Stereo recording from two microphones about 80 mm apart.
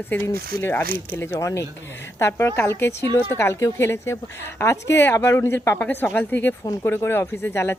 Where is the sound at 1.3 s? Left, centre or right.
Left.